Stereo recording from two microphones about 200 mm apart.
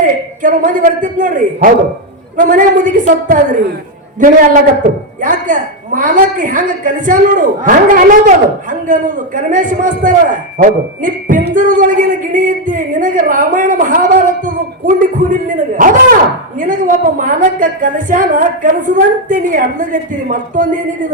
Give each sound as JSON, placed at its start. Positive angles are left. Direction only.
{"t": 0.0, "sound": "a man's voice", "side_deg": -40}